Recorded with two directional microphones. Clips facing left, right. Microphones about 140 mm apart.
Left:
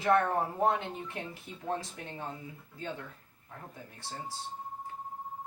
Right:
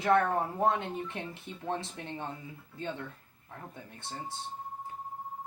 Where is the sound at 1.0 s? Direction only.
25° right (ahead or behind).